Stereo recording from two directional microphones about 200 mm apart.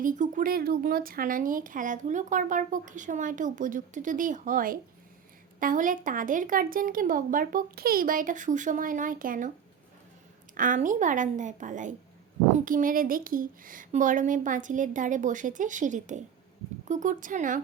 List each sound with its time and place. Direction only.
0.0 s a woman's voice: 40° right (ahead or behind)
10.5 s speech: 40° right (ahead or behind)